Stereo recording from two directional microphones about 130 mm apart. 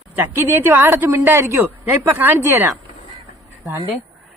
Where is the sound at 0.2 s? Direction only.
20° right (ahead or behind).